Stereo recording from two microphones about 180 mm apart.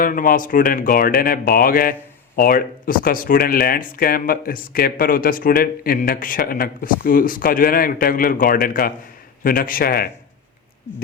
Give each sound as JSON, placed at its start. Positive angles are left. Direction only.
{"t": 0.0, "sound": "speech", "side_deg": 50}